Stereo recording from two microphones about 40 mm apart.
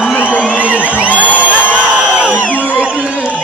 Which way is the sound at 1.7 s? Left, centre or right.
Right.